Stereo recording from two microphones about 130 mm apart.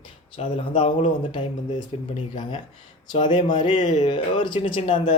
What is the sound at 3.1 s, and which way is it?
Speech, 35° left (ahead or behind).